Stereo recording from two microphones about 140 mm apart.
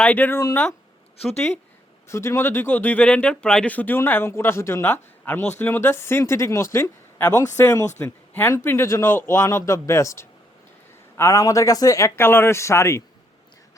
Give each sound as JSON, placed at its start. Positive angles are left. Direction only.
{"t": 0.0, "sound": "speech", "side_deg": 10}
{"t": 2.0, "sound": "a man's voice", "side_deg": 20}